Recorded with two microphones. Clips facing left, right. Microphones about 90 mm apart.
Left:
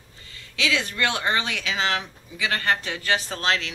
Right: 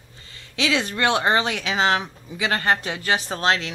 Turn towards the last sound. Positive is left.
turn(degrees=-25)  # may be behind; listen again after turning